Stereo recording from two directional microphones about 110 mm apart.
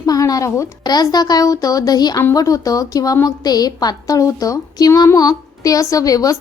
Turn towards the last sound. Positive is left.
turn(degrees=35)  # may be behind; listen again after turning